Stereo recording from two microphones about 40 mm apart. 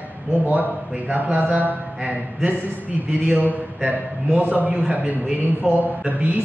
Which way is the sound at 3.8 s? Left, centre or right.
Right.